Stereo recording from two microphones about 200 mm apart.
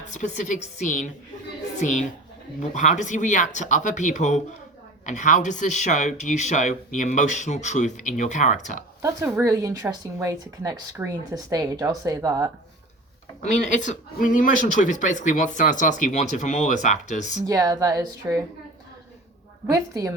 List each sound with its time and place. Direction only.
0.0 s speech: 35° left (ahead or behind)
9.0 s speech: 15° right (ahead or behind)
13.4 s speech: 35° left (ahead or behind)
17.4 s speech: 15° right (ahead or behind)
19.6 s speech: 20° right (ahead or behind)